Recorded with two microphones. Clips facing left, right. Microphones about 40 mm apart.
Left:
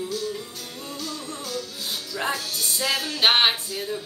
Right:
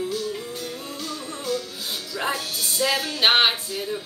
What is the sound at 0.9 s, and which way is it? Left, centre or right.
Music, centre.